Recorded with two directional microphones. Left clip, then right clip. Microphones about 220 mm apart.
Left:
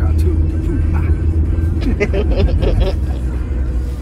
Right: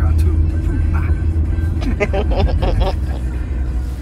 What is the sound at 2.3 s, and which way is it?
Speech, 15° right (ahead or behind).